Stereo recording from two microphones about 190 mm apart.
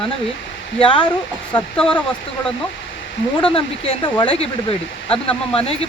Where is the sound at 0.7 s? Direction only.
25° left (ahead or behind).